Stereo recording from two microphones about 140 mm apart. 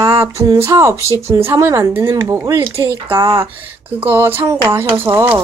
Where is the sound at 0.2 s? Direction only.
20° right (ahead or behind).